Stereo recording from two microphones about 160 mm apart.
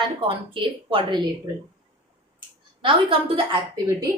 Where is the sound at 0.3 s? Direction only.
35° right (ahead or behind).